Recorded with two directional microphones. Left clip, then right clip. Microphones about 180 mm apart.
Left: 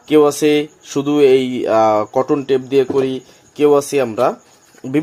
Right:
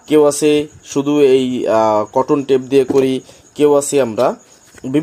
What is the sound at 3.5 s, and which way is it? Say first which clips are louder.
Speech: right 1 dB; 20° right (ahead or behind).